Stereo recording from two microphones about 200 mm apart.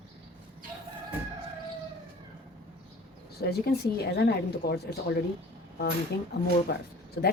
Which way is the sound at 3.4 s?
55° left (ahead or behind).